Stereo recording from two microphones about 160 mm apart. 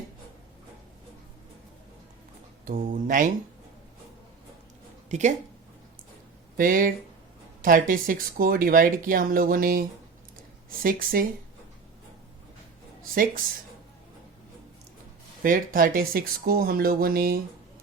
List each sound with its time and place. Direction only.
2.6 s speech: 60° right (ahead or behind)
5.0 s speech: 45° right (ahead or behind)
6.6 s speech: 60° right (ahead or behind)
10.8 s speech: 65° right (ahead or behind)
15.4 s speech: 60° right (ahead or behind)